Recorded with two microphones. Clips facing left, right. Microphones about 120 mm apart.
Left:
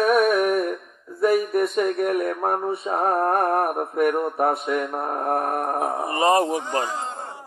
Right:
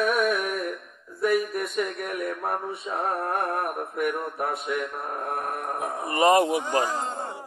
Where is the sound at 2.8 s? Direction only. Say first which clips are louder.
Left 6 dB; 45° left (ahead or behind).